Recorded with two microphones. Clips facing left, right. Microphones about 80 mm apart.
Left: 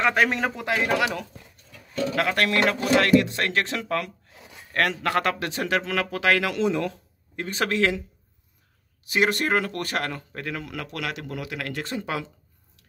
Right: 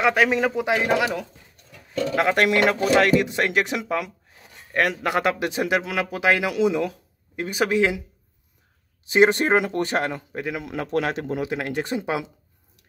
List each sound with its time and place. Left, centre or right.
0.0 s speech: centre
0.7 s speech: centre
9.0 s speech: right